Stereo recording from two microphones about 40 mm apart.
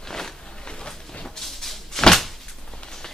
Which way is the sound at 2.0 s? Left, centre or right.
Centre.